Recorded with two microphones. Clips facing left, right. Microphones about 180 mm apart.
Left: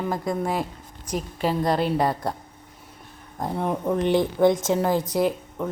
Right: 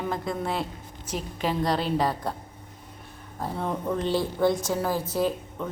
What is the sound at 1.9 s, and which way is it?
Speech, 10° left (ahead or behind).